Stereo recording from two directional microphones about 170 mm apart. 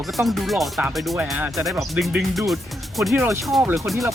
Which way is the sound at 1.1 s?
10° right (ahead or behind).